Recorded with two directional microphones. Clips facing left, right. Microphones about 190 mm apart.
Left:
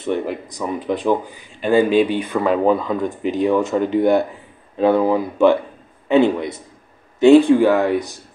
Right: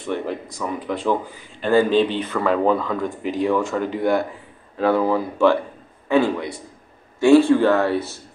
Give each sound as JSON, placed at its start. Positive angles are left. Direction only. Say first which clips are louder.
{"t": 0.0, "sound": "speech", "louder": "left 3 dB", "side_deg": 20}